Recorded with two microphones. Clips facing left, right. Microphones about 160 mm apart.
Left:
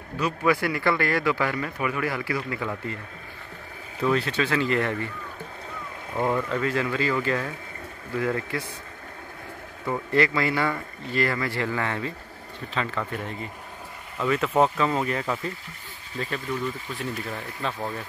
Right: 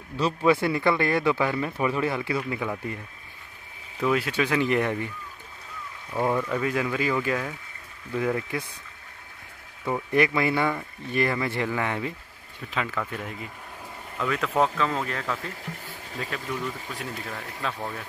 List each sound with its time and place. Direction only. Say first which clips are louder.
0.4 s speech: right 2 dB; 25° right (ahead or behind)
4.0 s speech: even; 10° right (ahead or behind)
6.1 s speech: even; 10° right (ahead or behind)
9.8 s speech: even; 15° right (ahead or behind); by 15.5 s 5° left (ahead or behind)
16.9 s speech: left 3 dB; centre (ahead or behind)